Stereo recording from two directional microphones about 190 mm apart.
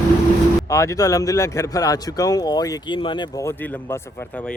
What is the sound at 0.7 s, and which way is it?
Speech, 15° left (ahead or behind).